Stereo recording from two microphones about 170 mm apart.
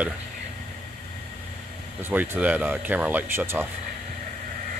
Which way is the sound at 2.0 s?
15° right (ahead or behind).